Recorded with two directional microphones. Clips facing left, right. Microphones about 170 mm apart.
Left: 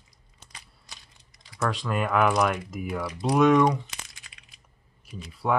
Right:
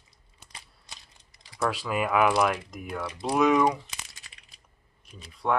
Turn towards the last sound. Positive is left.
turn(degrees=5)  # may be behind; listen again after turning